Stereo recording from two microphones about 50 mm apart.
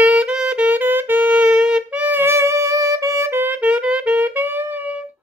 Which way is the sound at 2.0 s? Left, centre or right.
Right.